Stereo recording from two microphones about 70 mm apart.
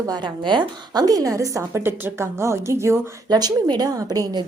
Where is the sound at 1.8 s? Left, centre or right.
Right.